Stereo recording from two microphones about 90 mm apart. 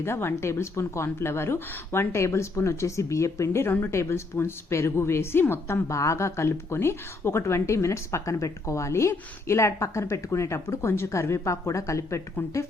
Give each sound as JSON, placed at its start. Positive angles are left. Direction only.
{"t": 0.0, "sound": "speech", "side_deg": 25}